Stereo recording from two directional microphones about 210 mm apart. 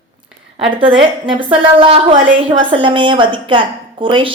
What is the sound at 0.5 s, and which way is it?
A woman's voice, 25° right (ahead or behind).